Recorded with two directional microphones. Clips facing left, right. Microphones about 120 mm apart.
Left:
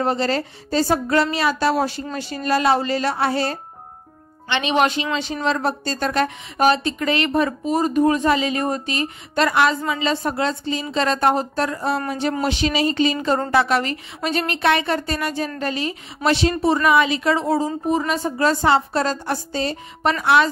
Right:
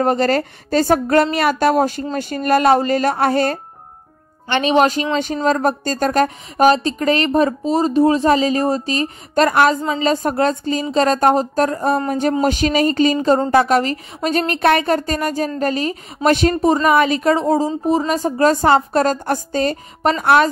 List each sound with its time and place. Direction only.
0.0 s a woman's voice: 50° right (ahead or behind)